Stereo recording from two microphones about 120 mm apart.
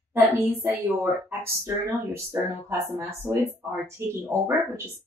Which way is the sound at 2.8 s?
20° right (ahead or behind).